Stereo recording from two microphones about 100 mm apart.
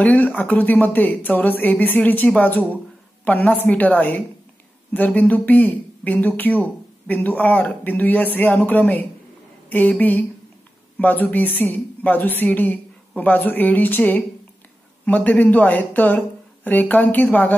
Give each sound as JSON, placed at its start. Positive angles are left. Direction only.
{"t": 0.0, "sound": "speech", "side_deg": 15}